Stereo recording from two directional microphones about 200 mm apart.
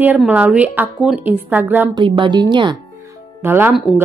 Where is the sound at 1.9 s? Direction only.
25° right (ahead or behind).